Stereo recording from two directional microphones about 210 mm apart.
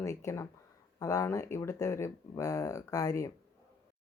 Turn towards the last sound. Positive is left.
turn(degrees=15)  # may be behind; listen again after turning